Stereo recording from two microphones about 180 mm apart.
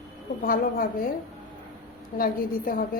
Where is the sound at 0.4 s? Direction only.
50° left (ahead or behind).